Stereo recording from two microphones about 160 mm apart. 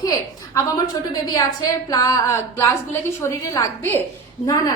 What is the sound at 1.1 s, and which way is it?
A woman's voice, 25° left (ahead or behind).